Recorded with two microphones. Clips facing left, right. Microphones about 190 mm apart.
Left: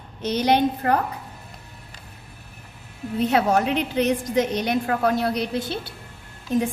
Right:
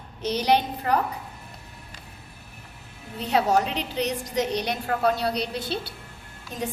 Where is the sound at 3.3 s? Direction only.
60° left (ahead or behind).